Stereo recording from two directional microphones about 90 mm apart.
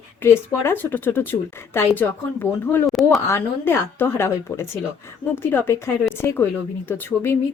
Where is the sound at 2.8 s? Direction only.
Centre (ahead or behind).